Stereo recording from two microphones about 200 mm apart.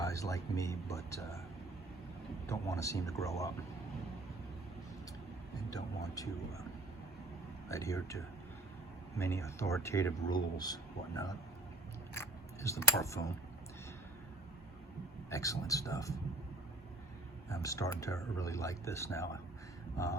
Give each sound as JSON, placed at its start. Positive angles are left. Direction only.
{"t": 0.0, "sound": "speech", "side_deg": 15}
{"t": 2.5, "sound": "speech", "side_deg": 15}
{"t": 6.2, "sound": "speech", "side_deg": 15}
{"t": 7.7, "sound": "speech", "side_deg": 15}
{"t": 15.3, "sound": "speech", "side_deg": 15}
{"t": 17.5, "sound": "speech", "side_deg": 15}